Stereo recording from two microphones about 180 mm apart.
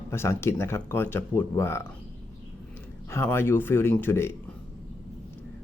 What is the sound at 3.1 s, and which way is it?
Speech, 15° left (ahead or behind).